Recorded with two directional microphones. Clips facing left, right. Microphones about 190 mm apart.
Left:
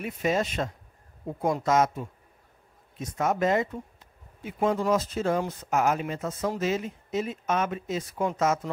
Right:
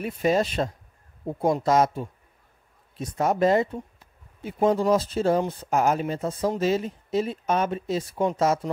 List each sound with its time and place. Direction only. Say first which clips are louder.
0.0 s speech: right 4 dB; 35° right (ahead or behind)